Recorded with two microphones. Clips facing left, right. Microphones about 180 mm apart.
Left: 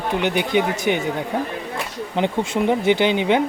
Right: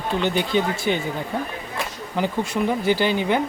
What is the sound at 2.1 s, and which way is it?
Speech, 25° left (ahead or behind).